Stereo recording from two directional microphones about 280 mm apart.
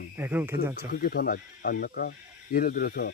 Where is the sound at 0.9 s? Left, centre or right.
Left.